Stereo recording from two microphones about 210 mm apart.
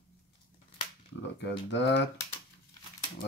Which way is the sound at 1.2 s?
55° left (ahead or behind).